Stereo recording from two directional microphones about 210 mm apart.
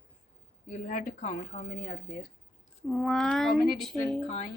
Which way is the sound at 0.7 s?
35° left (ahead or behind).